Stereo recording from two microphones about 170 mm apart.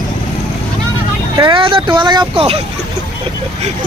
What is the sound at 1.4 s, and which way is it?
Speech, 30° right (ahead or behind).